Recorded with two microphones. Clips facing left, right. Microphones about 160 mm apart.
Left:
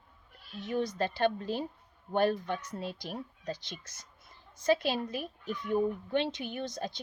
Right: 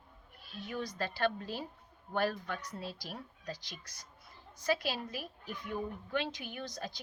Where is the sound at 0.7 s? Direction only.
25° left (ahead or behind).